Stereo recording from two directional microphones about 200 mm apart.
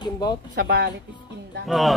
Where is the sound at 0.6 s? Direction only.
55° right (ahead or behind).